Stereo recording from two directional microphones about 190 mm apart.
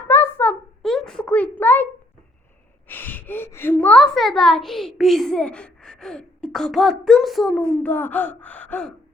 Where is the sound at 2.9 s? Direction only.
10° left (ahead or behind).